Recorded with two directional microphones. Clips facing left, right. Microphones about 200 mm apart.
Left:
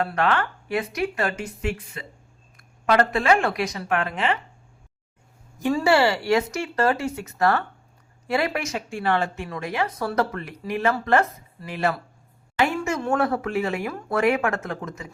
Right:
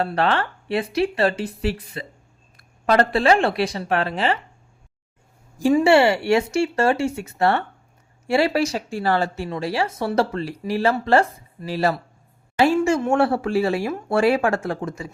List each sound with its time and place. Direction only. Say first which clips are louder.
0.0 s speech: right 2 dB; 30° right (ahead or behind)
5.6 s speech: right 4 dB; 25° right (ahead or behind)
12.5 s a sound: right 6 dB; 30° right (ahead or behind)
13.0 s speech: right 4 dB; 25° right (ahead or behind)